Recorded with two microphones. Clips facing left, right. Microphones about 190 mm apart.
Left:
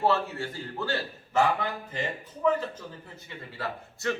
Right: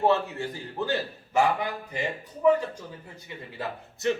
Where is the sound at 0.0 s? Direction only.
15° right (ahead or behind).